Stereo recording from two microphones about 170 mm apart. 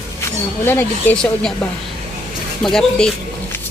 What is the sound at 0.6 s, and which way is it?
Speech, 15° left (ahead or behind).